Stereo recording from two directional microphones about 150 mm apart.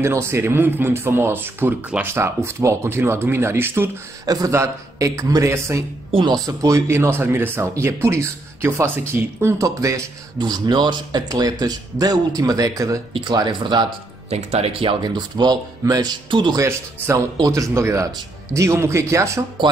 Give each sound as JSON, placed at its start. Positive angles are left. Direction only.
{"t": 0.0, "sound": "speech", "side_deg": -15}
{"t": 14.3, "sound": "speech", "side_deg": -45}
{"t": 16.6, "sound": "speech", "side_deg": -15}